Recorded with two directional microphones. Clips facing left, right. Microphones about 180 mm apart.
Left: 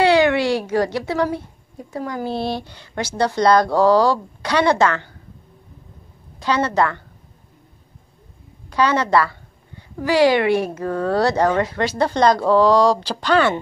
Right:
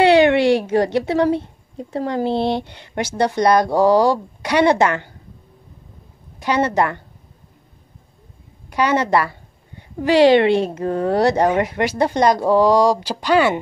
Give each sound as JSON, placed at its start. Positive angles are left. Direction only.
{"t": 0.0, "sound": "a child's voice", "side_deg": -25}
{"t": 6.4, "sound": "a woman's voice", "side_deg": -20}
{"t": 8.6, "sound": "a woman's voice", "side_deg": -15}